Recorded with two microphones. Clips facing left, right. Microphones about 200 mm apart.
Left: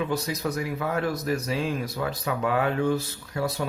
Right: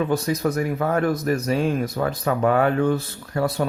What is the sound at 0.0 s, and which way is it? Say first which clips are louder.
Speech: right 6 dB; 50° right (ahead or behind).